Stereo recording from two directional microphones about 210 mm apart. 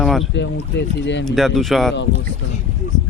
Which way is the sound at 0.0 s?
Centre (ahead or behind).